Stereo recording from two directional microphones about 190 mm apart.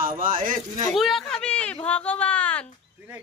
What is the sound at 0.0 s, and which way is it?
Speech, 45° right (ahead or behind).